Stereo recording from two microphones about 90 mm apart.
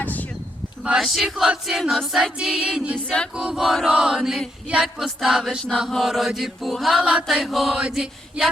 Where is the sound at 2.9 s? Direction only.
10° left (ahead or behind).